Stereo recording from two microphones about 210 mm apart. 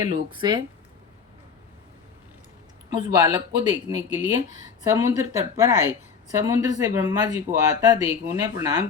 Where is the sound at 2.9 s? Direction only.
20° right (ahead or behind).